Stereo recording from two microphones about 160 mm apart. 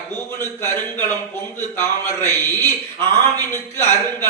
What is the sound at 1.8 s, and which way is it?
Speech, 15° left (ahead or behind).